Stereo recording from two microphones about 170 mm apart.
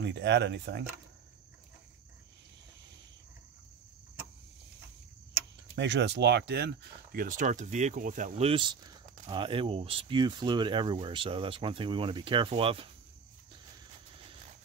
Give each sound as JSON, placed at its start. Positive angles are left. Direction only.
{"t": 0.0, "sound": "speech", "side_deg": -90}
{"t": 5.8, "sound": "speech", "side_deg": -90}
{"t": 8.5, "sound": "speech", "side_deg": -30}